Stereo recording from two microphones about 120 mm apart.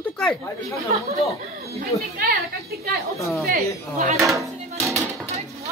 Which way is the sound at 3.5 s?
90° right.